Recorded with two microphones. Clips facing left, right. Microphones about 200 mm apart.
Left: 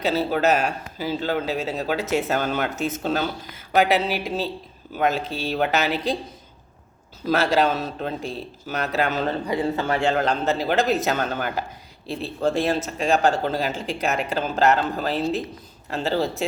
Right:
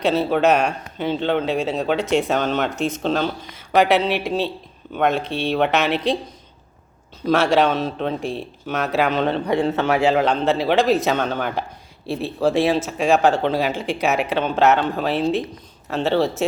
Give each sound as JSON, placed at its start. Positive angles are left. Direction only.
{"t": 0.0, "sound": "a man's voice", "side_deg": 0}
{"t": 7.3, "sound": "a man's voice", "side_deg": 0}
{"t": 9.5, "sound": "speech", "side_deg": -75}
{"t": 10.0, "sound": "a man's voice", "side_deg": 0}